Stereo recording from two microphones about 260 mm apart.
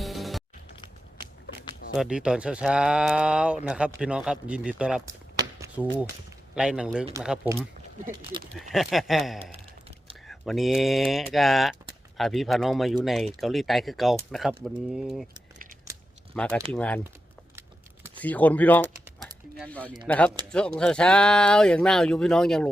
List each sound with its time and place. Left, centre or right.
0.0 s music: centre
1.9 s speech: centre
5.5 s a sound: centre
6.6 s speech: centre
8.4 s speech: centre
8.7 s speech: centre
16.3 s speech: centre
18.2 s speech: centre